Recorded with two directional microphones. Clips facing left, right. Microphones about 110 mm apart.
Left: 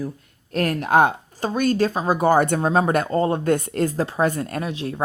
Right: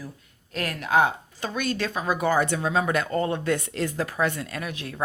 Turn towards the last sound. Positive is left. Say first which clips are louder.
# left 7 dB
turn(degrees=30)  # may be behind; listen again after turning